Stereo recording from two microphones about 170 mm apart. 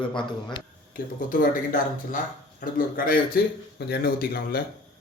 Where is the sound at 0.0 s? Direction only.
30° left (ahead or behind).